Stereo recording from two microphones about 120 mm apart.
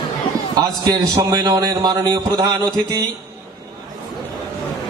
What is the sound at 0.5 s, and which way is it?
A man's voice, 35° right (ahead or behind).